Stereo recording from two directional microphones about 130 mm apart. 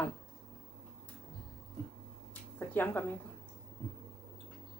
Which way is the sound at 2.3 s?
15° left (ahead or behind).